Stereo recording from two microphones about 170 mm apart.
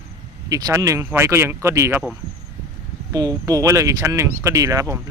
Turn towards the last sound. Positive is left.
turn(degrees=-20)  # may be behind; listen again after turning